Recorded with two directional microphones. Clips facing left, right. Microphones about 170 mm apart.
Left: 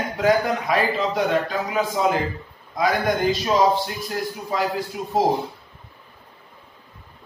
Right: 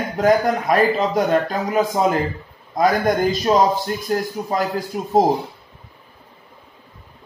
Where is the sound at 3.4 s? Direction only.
45° right (ahead or behind).